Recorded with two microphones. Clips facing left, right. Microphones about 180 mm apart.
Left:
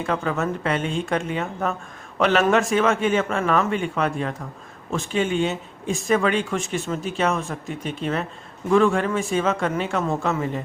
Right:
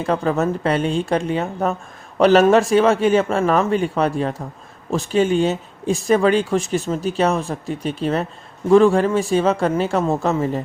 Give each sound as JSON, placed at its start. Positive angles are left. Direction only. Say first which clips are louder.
{"t": 0.0, "sound": "speech", "louder": "right 5 dB", "side_deg": -35}